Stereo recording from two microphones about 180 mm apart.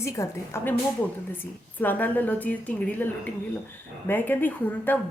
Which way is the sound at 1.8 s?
10° left (ahead or behind).